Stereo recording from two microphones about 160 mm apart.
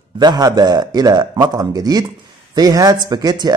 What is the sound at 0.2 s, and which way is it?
Speech, 25° right (ahead or behind).